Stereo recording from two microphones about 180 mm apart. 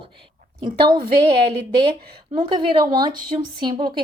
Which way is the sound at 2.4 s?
25° right (ahead or behind).